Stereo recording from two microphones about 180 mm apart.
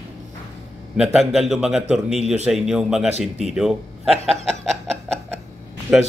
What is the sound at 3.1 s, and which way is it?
Speech, 35° right (ahead or behind).